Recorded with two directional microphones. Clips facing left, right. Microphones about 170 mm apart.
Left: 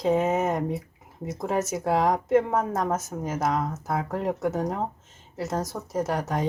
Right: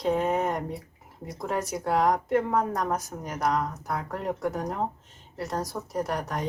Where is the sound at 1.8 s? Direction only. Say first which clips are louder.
Even; 25° left (ahead or behind).